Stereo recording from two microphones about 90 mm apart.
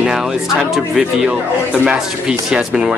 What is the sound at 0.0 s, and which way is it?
Speech, 5° right (ahead or behind).